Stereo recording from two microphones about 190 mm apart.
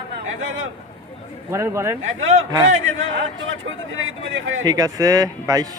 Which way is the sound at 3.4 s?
90° right.